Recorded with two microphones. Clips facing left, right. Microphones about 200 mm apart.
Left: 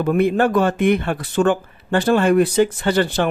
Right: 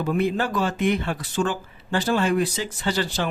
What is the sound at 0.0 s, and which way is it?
Speech, 55° left (ahead or behind).